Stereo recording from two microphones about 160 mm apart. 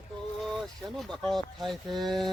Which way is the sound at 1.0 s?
5° left (ahead or behind).